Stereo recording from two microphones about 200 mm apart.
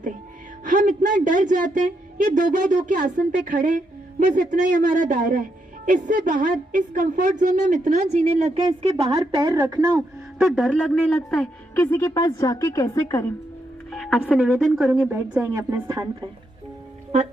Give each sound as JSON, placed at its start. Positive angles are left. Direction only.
{"t": 0.6, "sound": "speech", "side_deg": -40}
{"t": 8.5, "sound": "a woman's voice", "side_deg": -25}
{"t": 10.5, "sound": "a woman's voice", "side_deg": 5}
{"t": 13.9, "sound": "music", "side_deg": 5}
{"t": 14.3, "sound": "a woman's voice", "side_deg": 0}